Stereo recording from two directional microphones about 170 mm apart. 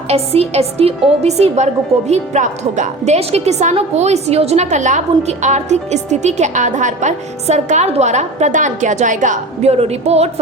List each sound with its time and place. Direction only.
0.1 s a woman's voice: 40° right (ahead or behind)